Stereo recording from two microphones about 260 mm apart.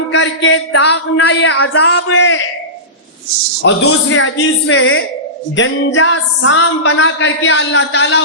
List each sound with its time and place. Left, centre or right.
0.1 s music: left
3.6 s music: left